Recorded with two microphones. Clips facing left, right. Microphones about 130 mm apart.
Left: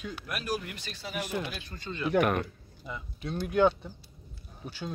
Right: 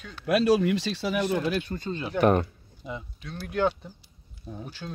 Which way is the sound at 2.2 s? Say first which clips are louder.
Right 7 dB; 30° right (ahead or behind).